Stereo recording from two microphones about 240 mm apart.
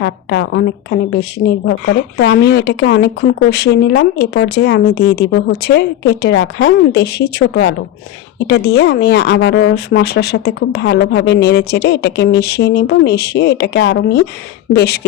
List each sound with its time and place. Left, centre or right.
0.0 s a woman's voice: left